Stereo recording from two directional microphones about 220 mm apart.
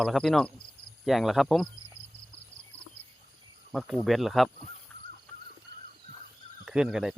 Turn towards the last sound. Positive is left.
turn(degrees=0)  # may be behind; listen again after turning